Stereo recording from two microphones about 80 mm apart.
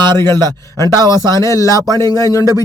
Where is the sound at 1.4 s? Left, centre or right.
Left.